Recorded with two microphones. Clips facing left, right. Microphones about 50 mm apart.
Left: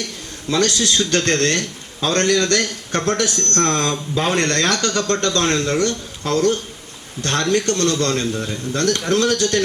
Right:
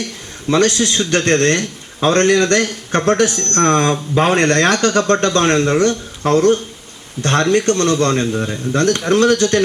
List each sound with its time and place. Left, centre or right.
0.5 s a man's voice: right